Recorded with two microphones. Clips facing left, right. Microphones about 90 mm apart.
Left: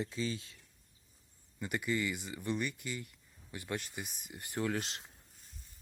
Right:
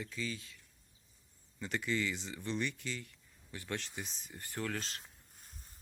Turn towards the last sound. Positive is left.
turn(degrees=-50)  # may be behind; listen again after turning